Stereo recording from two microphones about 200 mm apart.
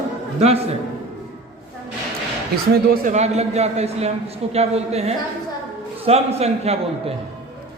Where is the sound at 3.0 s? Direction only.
35° right (ahead or behind).